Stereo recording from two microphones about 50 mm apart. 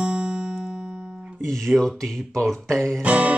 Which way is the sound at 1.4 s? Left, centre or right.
Centre.